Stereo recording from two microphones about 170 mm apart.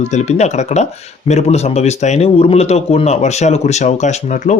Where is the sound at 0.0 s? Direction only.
40° left (ahead or behind).